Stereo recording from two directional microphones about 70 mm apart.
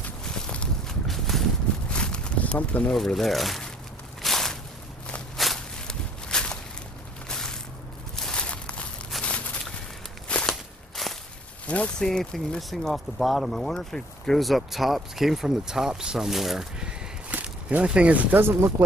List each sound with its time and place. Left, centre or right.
0.3 s a sound: centre
1.0 s boat: centre
1.9 s a sound: centre
2.9 s speech: centre
4.2 s a sound: centre
5.4 s walk: centre
6.2 s a sound: centre
10.2 s walk: centre
10.5 s walk: centre
11.6 s speech: centre
12.0 s speech: centre
17.3 s speech: right
18.4 s speech: right